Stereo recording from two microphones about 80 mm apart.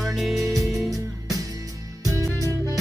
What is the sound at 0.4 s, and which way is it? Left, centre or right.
Music, right.